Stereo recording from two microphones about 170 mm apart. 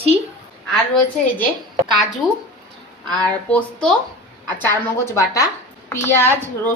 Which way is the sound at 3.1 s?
5° left (ahead or behind).